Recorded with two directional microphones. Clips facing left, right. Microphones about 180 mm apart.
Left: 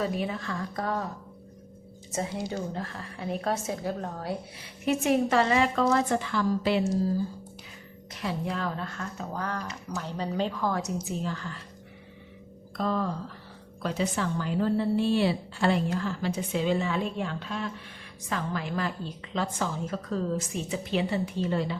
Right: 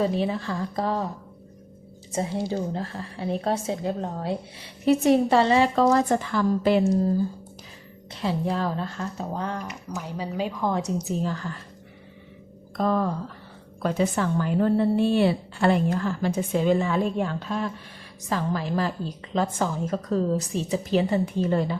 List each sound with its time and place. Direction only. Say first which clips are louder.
0.0 s a woman's voice: right 5 dB; 30° right (ahead or behind)
2.1 s a woman's voice: right 5 dB; 25° right (ahead or behind); by 7.1 s 50° right (ahead or behind)
8.1 s a woman's voice: right 5 dB; 30° right (ahead or behind); by 10.6 s 10° right (ahead or behind)
10.6 s a woman's voice: right 3 dB; 25° right (ahead or behind)
12.7 s a woman's voice: right 5 dB; 50° right (ahead or behind)